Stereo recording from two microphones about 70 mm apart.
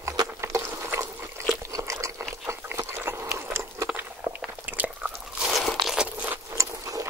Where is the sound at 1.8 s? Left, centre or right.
Right.